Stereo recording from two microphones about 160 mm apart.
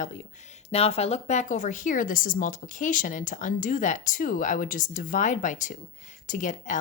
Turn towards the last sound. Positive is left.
turn(degrees=50)  # may be behind; listen again after turning